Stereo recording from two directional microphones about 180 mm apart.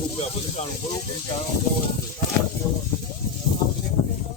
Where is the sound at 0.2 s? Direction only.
35° left (ahead or behind).